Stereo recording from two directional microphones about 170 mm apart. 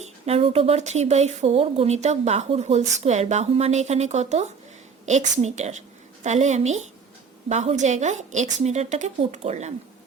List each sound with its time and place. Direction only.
0.0 s a woman's voice: 35° right (ahead or behind)